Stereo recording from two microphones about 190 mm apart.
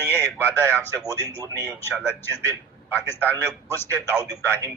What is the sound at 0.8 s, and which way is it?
Speech, 10° left (ahead or behind).